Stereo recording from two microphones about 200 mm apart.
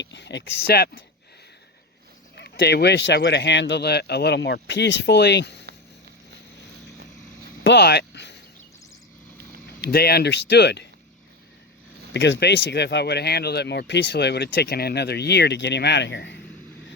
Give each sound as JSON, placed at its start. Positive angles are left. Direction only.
{"t": 0.0, "sound": "speech", "side_deg": 60}
{"t": 2.3, "sound": "speech", "side_deg": 60}
{"t": 7.6, "sound": "a sound", "side_deg": 60}
{"t": 9.8, "sound": "speech", "side_deg": 50}
{"t": 12.1, "sound": "speech", "side_deg": 60}